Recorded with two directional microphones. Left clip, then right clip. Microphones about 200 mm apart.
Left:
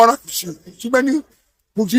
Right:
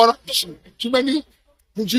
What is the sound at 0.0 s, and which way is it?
Speech, 15° left (ahead or behind).